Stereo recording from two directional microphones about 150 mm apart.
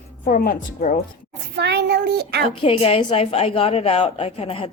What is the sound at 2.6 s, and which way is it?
A woman's voice, 40° left (ahead or behind).